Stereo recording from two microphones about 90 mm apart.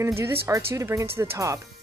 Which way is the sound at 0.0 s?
30° right (ahead or behind).